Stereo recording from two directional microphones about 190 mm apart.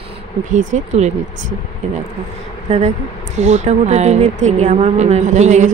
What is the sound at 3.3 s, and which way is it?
Speech, 35° right (ahead or behind).